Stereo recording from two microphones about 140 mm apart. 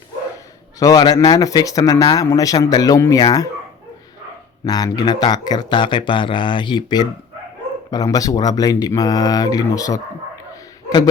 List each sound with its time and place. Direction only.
0.8 s speech: 25° left (ahead or behind)
4.6 s speech: 25° left (ahead or behind)
10.5 s a sound: 25° left (ahead or behind)